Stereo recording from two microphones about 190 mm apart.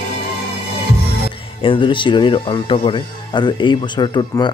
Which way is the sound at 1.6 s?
25° left (ahead or behind).